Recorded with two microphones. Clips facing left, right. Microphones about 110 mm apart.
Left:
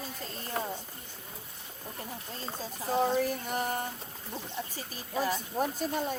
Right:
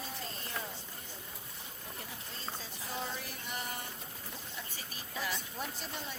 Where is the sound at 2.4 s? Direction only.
45° left (ahead or behind).